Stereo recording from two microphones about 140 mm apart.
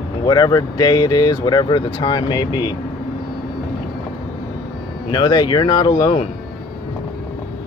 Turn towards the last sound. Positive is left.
turn(degrees=30)  # may be behind; listen again after turning